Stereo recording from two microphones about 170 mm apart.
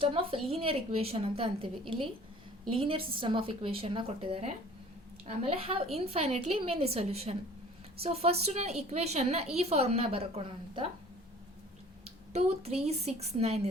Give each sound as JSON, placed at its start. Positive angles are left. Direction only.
{"t": 0.0, "sound": "a woman's voice", "side_deg": -30}
{"t": 12.0, "sound": "a woman's voice", "side_deg": -35}